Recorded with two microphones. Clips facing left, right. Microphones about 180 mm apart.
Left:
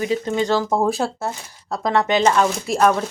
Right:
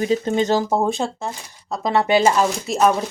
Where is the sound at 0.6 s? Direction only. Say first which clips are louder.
Left 1 dB; 5° right (ahead or behind).